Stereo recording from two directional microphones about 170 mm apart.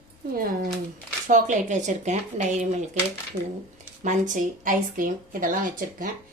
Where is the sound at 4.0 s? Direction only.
50° right (ahead or behind).